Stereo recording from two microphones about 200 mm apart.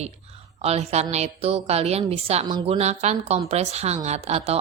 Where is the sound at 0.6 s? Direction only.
30° right (ahead or behind).